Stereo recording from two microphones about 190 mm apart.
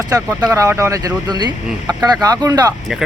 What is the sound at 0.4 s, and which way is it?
Speech, 15° right (ahead or behind).